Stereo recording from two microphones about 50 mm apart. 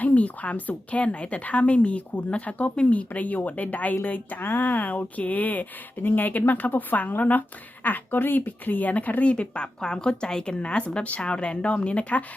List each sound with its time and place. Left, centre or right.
0.0 s a woman's voice: left
9.8 s a woman's voice: centre